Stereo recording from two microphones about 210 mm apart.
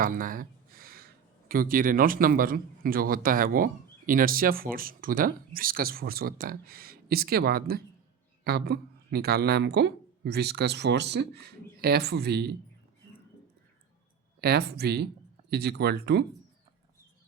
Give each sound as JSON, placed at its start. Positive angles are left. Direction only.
{"t": 0.0, "sound": "speech", "side_deg": -40}
{"t": 14.4, "sound": "speech", "side_deg": -50}